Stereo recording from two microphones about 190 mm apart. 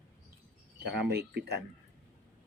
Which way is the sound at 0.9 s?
60° right (ahead or behind).